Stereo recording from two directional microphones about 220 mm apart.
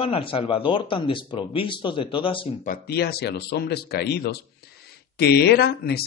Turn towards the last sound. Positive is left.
turn(degrees=45)  # may be behind; listen again after turning